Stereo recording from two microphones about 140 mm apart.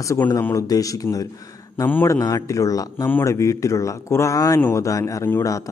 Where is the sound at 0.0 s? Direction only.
20° left (ahead or behind).